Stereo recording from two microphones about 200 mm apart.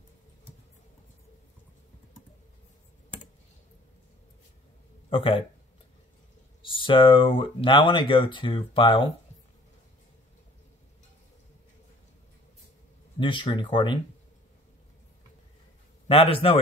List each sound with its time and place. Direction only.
5.1 s speech: 25° left (ahead or behind)
6.6 s speech: 25° left (ahead or behind)
13.2 s speech: 25° left (ahead or behind)
16.1 s speech: 30° left (ahead or behind)